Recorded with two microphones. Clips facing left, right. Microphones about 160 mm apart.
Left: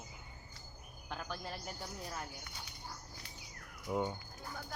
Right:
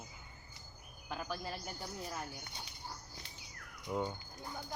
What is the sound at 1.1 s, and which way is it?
Speech, 5° right (ahead or behind).